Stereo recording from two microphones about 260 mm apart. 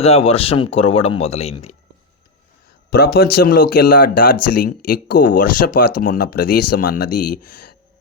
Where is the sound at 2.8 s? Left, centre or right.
Left.